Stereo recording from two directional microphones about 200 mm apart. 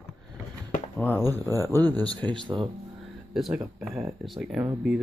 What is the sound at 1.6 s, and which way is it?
Speech, 10° left (ahead or behind).